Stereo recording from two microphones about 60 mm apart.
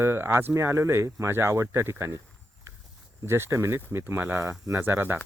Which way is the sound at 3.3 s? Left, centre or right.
Right.